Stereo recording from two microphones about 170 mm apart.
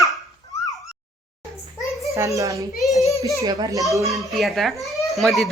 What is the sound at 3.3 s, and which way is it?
Speech, 20° right (ahead or behind).